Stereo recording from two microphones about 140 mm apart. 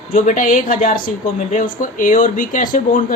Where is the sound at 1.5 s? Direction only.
70° left (ahead or behind).